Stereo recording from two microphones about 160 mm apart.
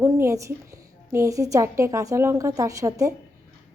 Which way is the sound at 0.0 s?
15° right (ahead or behind).